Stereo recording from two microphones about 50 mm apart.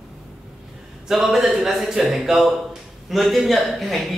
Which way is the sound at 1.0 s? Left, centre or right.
Centre.